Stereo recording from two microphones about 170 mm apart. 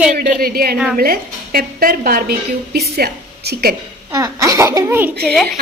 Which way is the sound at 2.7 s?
70° right (ahead or behind).